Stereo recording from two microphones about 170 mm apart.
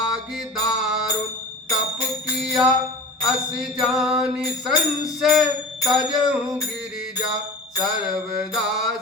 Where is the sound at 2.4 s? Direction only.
5° right (ahead or behind).